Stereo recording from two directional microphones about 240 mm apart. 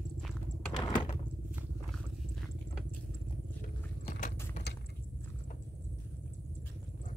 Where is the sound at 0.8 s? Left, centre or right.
Centre.